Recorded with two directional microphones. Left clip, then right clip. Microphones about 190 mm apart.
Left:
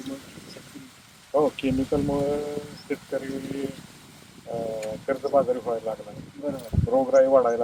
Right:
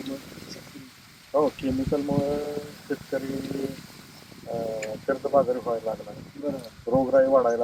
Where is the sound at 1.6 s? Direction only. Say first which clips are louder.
Left 2 dB; 25° left (ahead or behind).